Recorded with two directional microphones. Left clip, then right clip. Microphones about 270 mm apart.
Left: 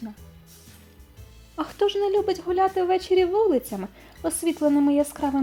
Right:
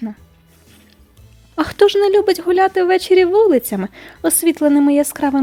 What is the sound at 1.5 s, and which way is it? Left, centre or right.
Speech, right.